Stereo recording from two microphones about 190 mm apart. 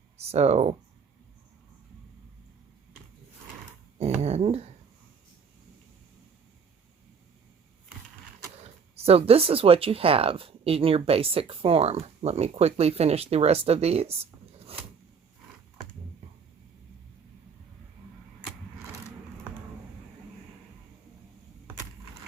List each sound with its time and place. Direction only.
0.2 s speech: 35° right (ahead or behind)
3.9 s speech: 35° right (ahead or behind)
8.6 s speech: 30° right (ahead or behind)